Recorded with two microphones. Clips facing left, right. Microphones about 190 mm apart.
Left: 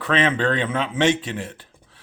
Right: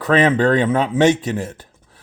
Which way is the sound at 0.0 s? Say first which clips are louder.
Right 6 dB; 40° right (ahead or behind).